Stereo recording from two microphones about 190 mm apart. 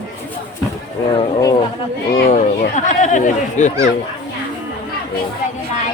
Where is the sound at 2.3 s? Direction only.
35° left (ahead or behind).